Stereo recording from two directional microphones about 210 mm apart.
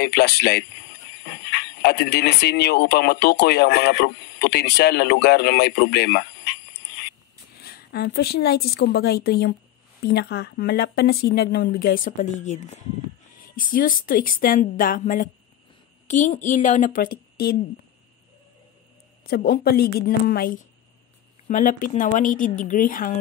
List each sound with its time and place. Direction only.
0.0 s speech: 50° left (ahead or behind)
7.5 s a woman's voice: 50° left (ahead or behind)
19.2 s speech: 45° left (ahead or behind)